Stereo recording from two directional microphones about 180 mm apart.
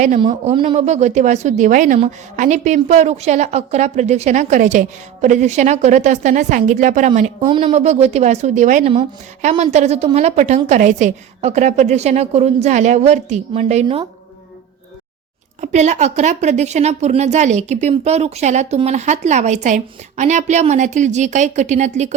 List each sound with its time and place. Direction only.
0.4 s a woman's voice: 30° right (ahead or behind)
7.4 s a woman's voice: 25° right (ahead or behind)
7.7 s a woman's voice: 40° right (ahead or behind)
8.9 s a woman's voice: 30° right (ahead or behind)
13.8 s a woman's voice: 25° right (ahead or behind)
15.6 s a woman's voice: 40° right (ahead or behind)